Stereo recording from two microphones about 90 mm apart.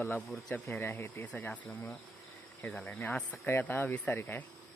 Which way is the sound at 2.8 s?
15° left (ahead or behind).